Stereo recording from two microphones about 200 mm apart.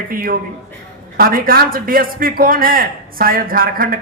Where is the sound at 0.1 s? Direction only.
45° right (ahead or behind).